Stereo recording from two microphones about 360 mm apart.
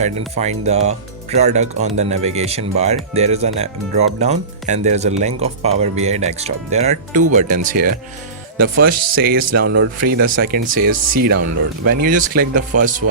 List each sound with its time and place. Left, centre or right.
0.0 s speech: centre
9.5 s speech: right
9.7 s speech: right